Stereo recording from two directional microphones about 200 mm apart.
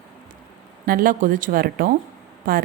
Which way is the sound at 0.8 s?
45° right (ahead or behind).